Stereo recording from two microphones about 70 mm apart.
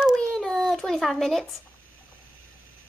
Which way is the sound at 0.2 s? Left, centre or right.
Centre.